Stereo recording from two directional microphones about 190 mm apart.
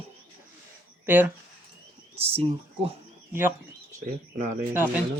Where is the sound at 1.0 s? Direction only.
10° right (ahead or behind).